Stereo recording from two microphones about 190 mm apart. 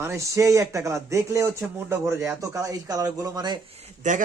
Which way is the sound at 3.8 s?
40° right (ahead or behind).